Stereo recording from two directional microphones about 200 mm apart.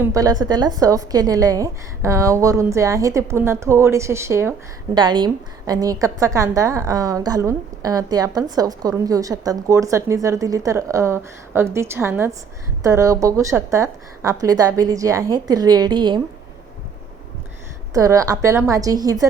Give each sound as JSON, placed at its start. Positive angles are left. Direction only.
{"t": 0.0, "sound": "a woman's voice", "side_deg": -15}
{"t": 17.9, "sound": "a woman's voice", "side_deg": -15}